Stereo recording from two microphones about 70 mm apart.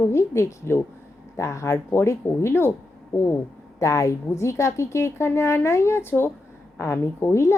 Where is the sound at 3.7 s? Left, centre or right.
Left.